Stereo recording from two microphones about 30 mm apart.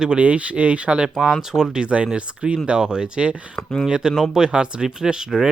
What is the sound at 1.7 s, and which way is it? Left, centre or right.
Speech, right.